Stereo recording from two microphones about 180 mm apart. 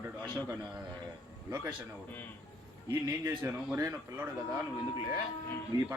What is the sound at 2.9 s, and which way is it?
A man's voice, 15° right (ahead or behind).